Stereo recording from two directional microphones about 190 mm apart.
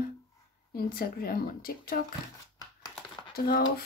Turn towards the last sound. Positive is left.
turn(degrees=55)  # may be behind; listen again after turning